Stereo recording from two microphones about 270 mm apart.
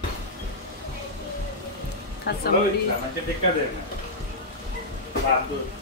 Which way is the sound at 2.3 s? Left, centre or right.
Left.